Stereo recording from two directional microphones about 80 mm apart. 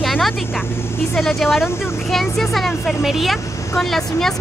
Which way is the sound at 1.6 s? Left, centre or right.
Left.